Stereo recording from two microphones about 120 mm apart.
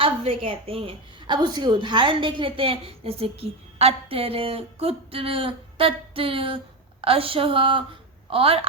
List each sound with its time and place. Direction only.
0.4 s a woman's voice: 50° right (ahead or behind)